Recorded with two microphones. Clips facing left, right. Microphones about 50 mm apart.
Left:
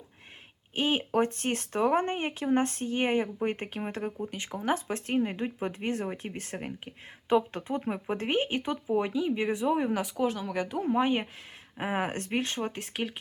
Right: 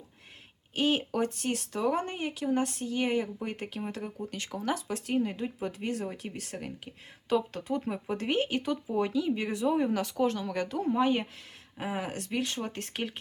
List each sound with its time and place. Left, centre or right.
0.8 s speech: left
1.2 s speech: left
11.8 s speech: left
12.7 s speech: centre